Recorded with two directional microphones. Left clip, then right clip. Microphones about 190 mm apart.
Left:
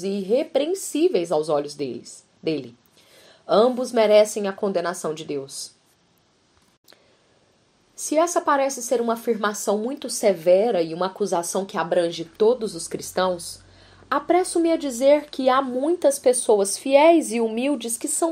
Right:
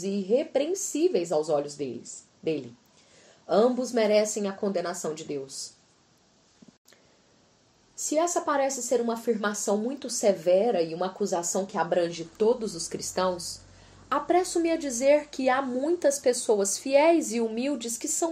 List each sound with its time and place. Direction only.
0.0 s a woman's voice: 30° left (ahead or behind)
3.4 s a woman's voice: 25° left (ahead or behind)
7.9 s a woman's voice: 25° left (ahead or behind)